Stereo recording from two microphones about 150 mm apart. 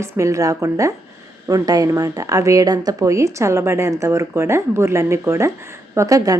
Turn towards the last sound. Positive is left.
turn(degrees=-25)  # may be behind; listen again after turning